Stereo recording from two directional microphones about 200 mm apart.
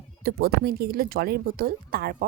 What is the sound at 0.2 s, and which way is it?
A woman's voice, 50° right (ahead or behind).